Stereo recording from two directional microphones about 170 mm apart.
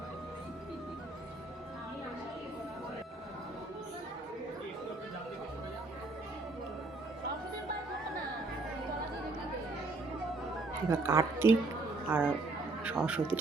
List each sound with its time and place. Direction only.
10.8 s a woman's voice: 15° right (ahead or behind)